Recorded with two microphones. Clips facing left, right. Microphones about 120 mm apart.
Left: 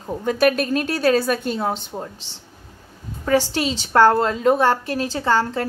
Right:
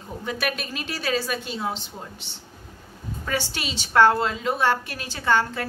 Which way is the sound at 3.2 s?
35° left (ahead or behind).